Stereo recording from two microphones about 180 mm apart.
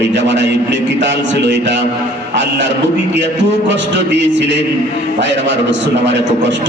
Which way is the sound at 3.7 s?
80° right.